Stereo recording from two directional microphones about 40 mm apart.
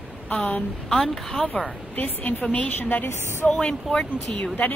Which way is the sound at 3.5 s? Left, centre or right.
Left.